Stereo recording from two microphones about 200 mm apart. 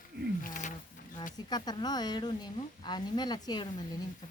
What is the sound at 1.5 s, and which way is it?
Speech, 20° left (ahead or behind).